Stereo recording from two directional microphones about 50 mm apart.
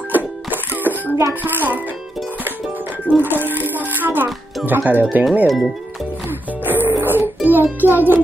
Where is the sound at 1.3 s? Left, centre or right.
Right.